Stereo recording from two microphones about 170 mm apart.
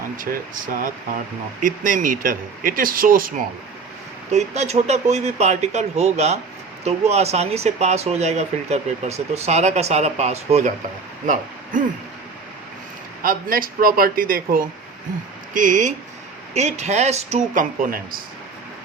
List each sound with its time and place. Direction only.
0.2 s speech: 55° right (ahead or behind)
4.3 s speech: 40° right (ahead or behind)
11.3 s speech: 50° right (ahead or behind)
13.2 s speech: 60° right (ahead or behind)
15.5 s speech: 50° right (ahead or behind)